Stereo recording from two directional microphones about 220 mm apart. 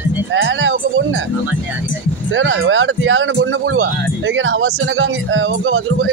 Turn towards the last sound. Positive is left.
turn(degrees=-65)  # may be behind; listen again after turning